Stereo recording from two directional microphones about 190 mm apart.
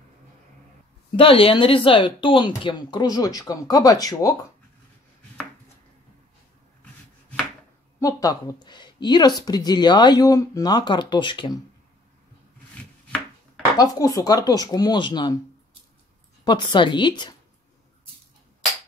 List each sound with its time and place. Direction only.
1.1 s speech: 30° left (ahead or behind)
6.8 s chopping: 5° left (ahead or behind)
8.0 s speech: 20° left (ahead or behind)
13.7 s speech: 15° left (ahead or behind)
16.4 s speech: 25° left (ahead or behind)